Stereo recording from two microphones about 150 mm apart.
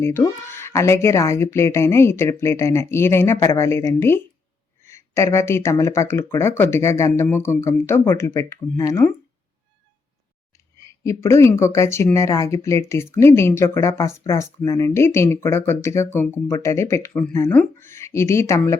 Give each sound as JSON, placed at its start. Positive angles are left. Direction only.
{"t": 0.0, "sound": "speech", "side_deg": 15}
{"t": 10.8, "sound": "a woman's voice", "side_deg": 20}